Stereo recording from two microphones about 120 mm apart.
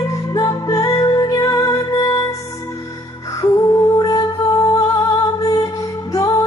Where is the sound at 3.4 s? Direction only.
30° left (ahead or behind).